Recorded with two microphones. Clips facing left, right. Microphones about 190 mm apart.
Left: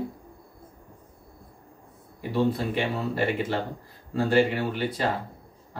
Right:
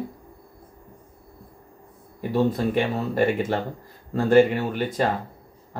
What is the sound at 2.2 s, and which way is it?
Speech, 45° right (ahead or behind).